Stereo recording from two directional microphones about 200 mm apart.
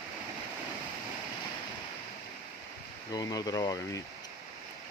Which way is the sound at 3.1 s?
20° left (ahead or behind).